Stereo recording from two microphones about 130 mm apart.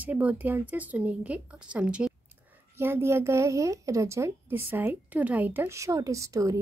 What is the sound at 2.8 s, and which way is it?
A woman's voice, 20° right (ahead or behind).